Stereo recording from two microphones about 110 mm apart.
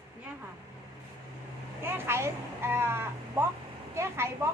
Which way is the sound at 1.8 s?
20° right (ahead or behind).